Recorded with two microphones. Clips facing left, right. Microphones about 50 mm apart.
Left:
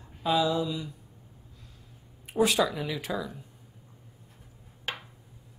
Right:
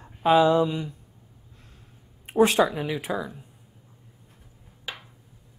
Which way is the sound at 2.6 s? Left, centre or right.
Right.